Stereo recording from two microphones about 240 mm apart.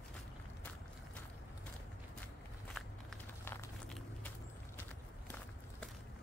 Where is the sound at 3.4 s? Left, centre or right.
Centre.